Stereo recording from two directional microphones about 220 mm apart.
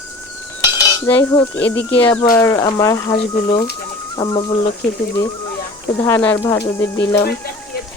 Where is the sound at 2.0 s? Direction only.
15° left (ahead or behind).